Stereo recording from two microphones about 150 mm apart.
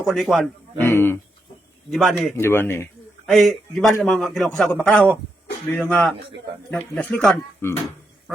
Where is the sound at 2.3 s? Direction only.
15° left (ahead or behind).